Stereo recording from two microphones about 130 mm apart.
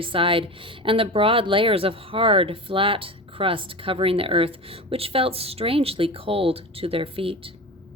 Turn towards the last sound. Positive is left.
turn(degrees=-45)  # may be behind; listen again after turning